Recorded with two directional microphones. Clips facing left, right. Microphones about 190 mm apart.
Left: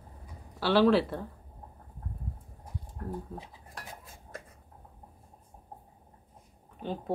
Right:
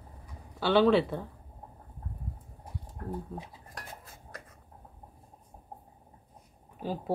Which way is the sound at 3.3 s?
Centre (ahead or behind).